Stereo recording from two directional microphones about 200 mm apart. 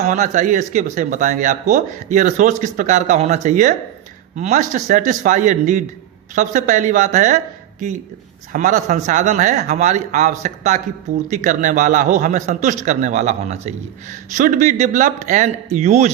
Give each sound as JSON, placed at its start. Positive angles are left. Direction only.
{"t": 0.0, "sound": "speech", "side_deg": -35}